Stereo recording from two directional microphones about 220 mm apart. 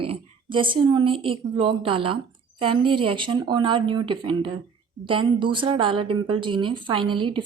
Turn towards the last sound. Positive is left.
turn(degrees=-25)  # may be behind; listen again after turning